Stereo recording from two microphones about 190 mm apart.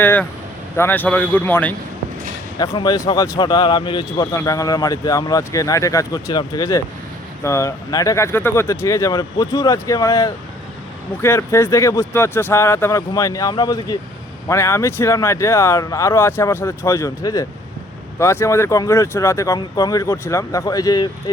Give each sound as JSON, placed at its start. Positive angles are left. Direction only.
{"t": 0.0, "sound": "speech", "side_deg": 10}
{"t": 2.6, "sound": "speech", "side_deg": 20}